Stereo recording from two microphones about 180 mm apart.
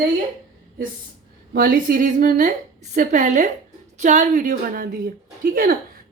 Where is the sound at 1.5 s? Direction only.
55° right (ahead or behind).